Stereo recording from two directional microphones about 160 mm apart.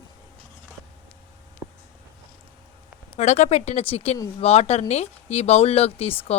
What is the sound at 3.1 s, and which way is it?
Speech, 45° left (ahead or behind).